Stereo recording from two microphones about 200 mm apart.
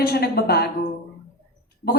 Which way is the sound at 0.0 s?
50° left (ahead or behind).